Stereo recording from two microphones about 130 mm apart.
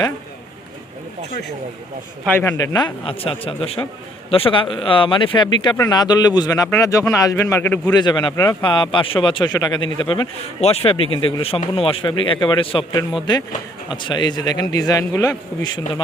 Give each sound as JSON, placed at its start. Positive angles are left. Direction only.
{"t": 2.2, "sound": "a man's voice", "side_deg": 15}
{"t": 2.6, "sound": "speech", "side_deg": 35}
{"t": 3.2, "sound": "speech", "side_deg": 45}
{"t": 5.7, "sound": "speech", "side_deg": 25}
{"t": 7.9, "sound": "speech", "side_deg": 35}
{"t": 10.6, "sound": "speech", "side_deg": 50}